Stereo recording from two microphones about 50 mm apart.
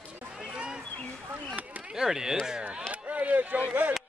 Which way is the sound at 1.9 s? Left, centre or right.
Centre.